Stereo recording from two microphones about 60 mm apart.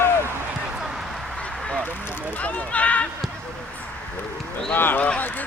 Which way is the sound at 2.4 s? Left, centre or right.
Left.